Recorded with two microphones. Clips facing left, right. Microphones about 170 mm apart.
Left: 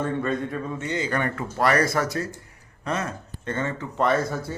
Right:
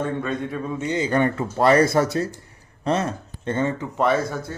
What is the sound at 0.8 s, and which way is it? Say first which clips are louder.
Speech: right 7 dB; 20° right (ahead or behind).